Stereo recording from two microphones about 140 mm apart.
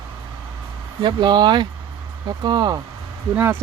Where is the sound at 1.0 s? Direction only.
30° right (ahead or behind).